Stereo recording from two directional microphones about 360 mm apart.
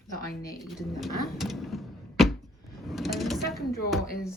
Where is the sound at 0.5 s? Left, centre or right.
Centre.